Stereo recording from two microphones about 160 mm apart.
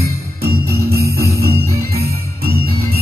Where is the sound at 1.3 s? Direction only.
70° right (ahead or behind).